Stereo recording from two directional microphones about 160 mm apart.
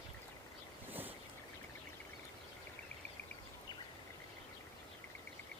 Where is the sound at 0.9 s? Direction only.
10° right (ahead or behind).